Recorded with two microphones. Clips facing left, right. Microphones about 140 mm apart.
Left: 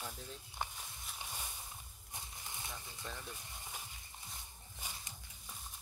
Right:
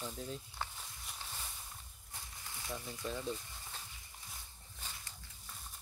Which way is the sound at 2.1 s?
20° left (ahead or behind).